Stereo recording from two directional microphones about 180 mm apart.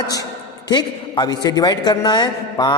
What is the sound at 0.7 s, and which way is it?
A man's voice, 25° left (ahead or behind).